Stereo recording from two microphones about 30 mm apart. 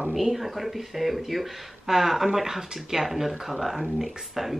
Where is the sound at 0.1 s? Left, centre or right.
Centre.